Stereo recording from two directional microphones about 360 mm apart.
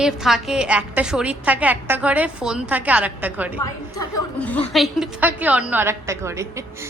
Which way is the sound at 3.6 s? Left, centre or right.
Centre.